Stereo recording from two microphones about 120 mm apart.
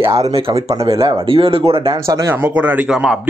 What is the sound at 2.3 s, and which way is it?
Speech, 15° right (ahead or behind).